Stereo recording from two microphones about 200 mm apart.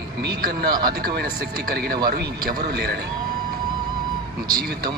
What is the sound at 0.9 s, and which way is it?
A man's voice, 50° right (ahead or behind).